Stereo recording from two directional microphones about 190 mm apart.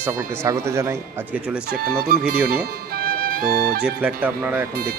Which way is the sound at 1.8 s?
50° right (ahead or behind).